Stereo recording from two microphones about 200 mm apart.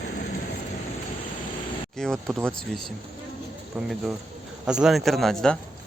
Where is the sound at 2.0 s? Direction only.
Centre (ahead or behind).